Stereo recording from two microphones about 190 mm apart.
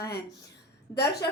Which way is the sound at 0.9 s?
60° left (ahead or behind).